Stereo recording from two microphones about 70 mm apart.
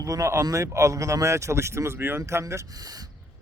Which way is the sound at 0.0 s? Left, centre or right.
Right.